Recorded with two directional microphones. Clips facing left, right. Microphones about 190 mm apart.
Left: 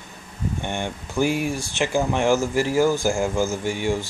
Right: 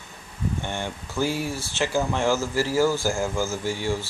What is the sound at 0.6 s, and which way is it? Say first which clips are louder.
Speech: left 3 dB; 15° left (ahead or behind).